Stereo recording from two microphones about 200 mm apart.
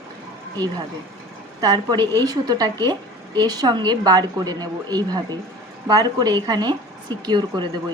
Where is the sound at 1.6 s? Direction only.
20° right (ahead or behind).